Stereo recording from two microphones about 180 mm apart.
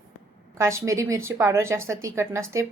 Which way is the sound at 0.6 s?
15° right (ahead or behind).